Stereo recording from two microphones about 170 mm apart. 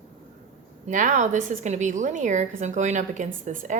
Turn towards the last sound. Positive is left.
turn(degrees=-45)  # may be behind; listen again after turning